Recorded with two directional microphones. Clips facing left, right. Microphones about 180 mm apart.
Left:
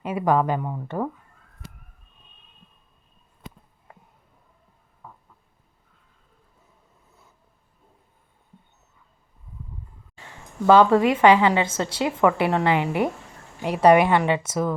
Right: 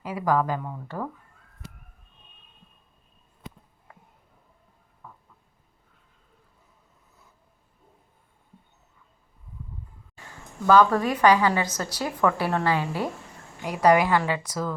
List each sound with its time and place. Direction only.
0.0 s a woman's voice: 25° left (ahead or behind)
5.0 s a sound: 15° left (ahead or behind)
10.7 s a woman's voice: 25° left (ahead or behind)